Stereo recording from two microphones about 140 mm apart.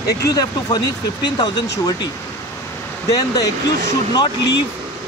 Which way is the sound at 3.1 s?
25° left (ahead or behind).